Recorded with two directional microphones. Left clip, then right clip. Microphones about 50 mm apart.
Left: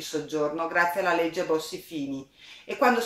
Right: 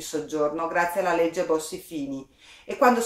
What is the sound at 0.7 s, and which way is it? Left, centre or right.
Speech, right.